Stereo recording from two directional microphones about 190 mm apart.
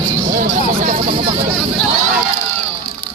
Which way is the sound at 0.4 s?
50° right (ahead or behind).